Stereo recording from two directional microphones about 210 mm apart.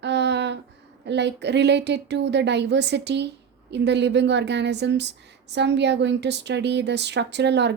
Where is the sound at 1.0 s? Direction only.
55° right (ahead or behind).